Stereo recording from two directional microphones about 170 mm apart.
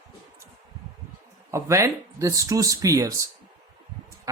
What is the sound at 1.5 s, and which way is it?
Speech, 15° right (ahead or behind).